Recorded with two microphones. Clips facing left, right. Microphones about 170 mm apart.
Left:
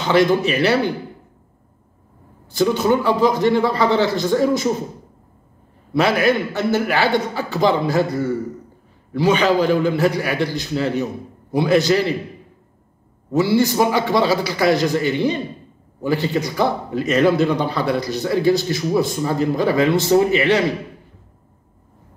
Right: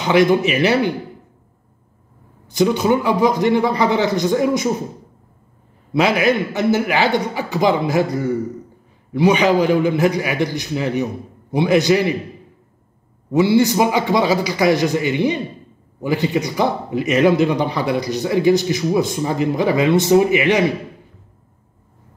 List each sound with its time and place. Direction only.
0.0 s a man's voice: 15° right (ahead or behind)
2.4 s a man's voice: 15° right (ahead or behind)
5.9 s a man's voice: 15° right (ahead or behind)
13.3 s a man's voice: 20° right (ahead or behind)